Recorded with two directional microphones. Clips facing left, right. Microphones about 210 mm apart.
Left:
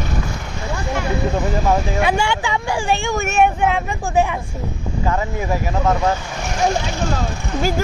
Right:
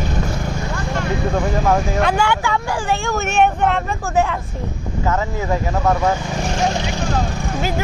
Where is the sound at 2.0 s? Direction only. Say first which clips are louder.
Right 1 dB; 15° left (ahead or behind).